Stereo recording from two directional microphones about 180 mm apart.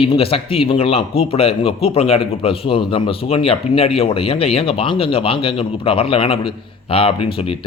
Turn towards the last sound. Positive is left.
turn(degrees=30)  # may be behind; listen again after turning